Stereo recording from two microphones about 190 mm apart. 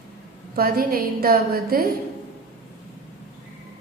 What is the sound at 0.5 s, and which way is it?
A woman's voice, 50° right (ahead or behind).